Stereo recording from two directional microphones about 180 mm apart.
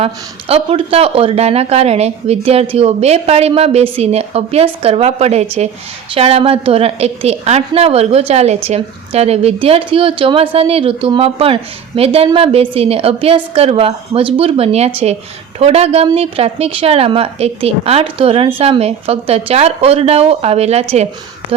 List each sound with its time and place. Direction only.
0.0 s a woman's voice: 35° right (ahead or behind)